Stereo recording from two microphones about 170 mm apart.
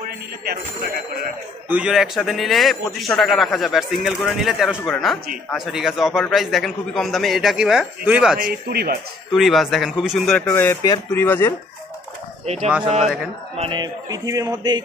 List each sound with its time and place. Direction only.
1.7 s a man's voice: 5° right (ahead or behind)
8.4 s a man's voice: 65° right (ahead or behind)
9.3 s a man's voice: centre (ahead or behind)
10.4 s speech: 15° left (ahead or behind)
13.0 s a man's voice: centre (ahead or behind)
13.6 s a sound: 30° right (ahead or behind)